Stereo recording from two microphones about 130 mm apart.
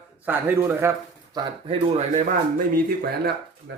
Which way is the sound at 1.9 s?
65° right (ahead or behind).